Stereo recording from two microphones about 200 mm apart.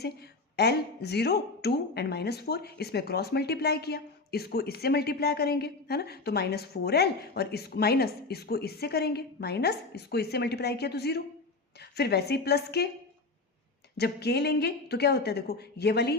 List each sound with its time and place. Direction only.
0.0 s a woman's voice: 55° left (ahead or behind)
13.9 s speech: 55° left (ahead or behind)